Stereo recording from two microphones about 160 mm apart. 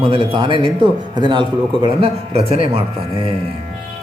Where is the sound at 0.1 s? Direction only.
30° right (ahead or behind).